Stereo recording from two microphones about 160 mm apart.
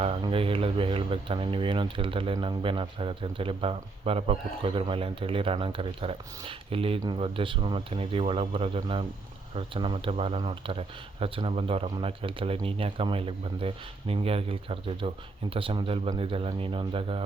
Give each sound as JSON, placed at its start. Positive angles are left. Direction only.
{"t": 0.0, "sound": "speech", "side_deg": -35}